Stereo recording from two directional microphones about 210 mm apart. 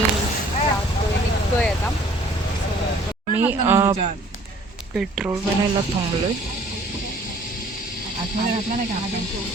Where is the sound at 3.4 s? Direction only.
10° right (ahead or behind).